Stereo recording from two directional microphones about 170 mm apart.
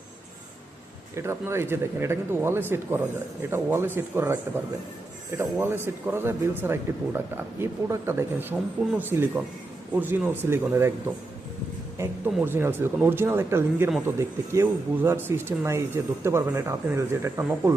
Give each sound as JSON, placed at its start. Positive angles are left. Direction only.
{"t": 1.1, "sound": "speech", "side_deg": -15}
{"t": 5.4, "sound": "speech", "side_deg": -15}
{"t": 11.9, "sound": "speech", "side_deg": -10}